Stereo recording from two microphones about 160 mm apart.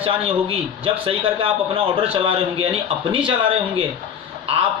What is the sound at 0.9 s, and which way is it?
A man's voice, 35° right (ahead or behind).